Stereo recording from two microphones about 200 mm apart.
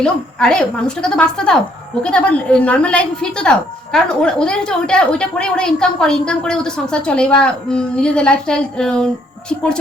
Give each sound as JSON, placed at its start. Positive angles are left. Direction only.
{"t": 0.0, "sound": "a woman's voice", "side_deg": 5}